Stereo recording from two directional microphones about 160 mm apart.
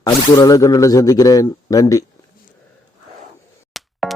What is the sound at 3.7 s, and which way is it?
Music, centre (ahead or behind).